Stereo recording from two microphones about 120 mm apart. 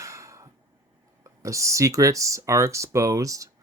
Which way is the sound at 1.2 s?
25° right (ahead or behind).